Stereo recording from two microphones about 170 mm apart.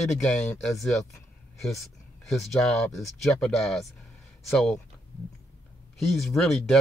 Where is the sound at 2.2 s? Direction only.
Centre (ahead or behind).